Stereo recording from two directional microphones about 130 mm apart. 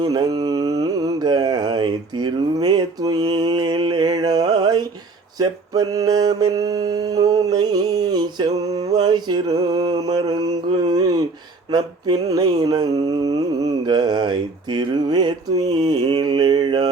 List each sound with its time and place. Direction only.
0.0 s mantra: 30° right (ahead or behind)